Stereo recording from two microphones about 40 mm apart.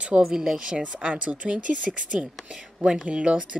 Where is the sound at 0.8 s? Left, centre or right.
Right.